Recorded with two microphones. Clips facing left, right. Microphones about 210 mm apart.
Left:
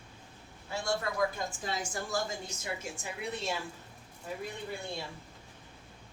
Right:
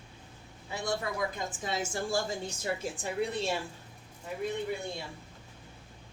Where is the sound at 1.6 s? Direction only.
25° right (ahead or behind).